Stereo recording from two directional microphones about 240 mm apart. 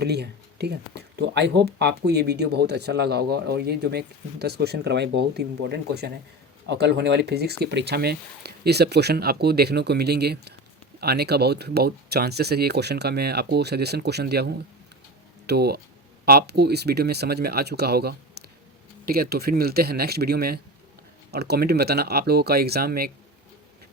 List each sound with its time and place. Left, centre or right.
0.0 s speech: right